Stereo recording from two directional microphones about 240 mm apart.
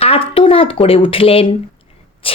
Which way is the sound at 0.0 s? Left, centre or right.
Left.